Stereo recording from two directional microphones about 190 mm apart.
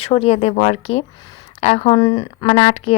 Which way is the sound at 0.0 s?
30° left (ahead or behind).